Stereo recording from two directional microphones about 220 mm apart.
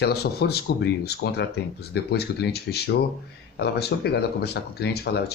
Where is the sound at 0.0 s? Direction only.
45° left (ahead or behind).